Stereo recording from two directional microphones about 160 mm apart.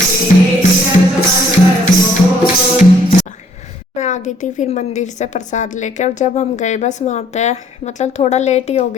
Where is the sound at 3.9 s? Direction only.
50° left (ahead or behind).